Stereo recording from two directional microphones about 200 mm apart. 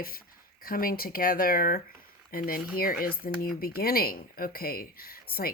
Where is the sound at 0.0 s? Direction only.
45° left (ahead or behind).